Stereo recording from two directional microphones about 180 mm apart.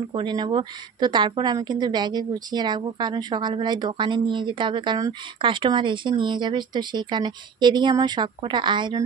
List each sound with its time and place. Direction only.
0.1 s a woman's voice: 25° right (ahead or behind)